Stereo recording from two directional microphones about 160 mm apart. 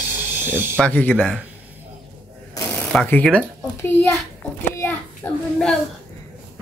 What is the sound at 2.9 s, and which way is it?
Speech, 10° left (ahead or behind).